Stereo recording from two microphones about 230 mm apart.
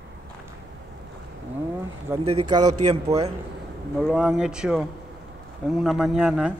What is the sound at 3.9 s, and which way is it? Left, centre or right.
Speech, centre.